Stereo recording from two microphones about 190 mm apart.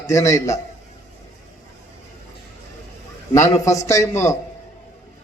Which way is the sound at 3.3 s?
15° left (ahead or behind).